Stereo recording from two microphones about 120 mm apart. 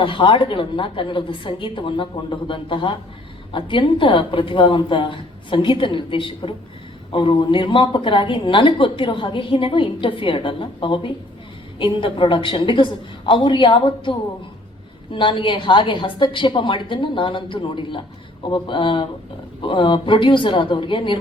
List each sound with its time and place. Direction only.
0.0 s a woman's voice: 45° left (ahead or behind)